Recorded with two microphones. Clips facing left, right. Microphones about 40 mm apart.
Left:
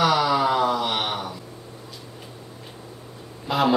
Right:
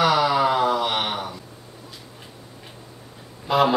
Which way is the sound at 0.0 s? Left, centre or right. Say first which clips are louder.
Right 1 dB; centre.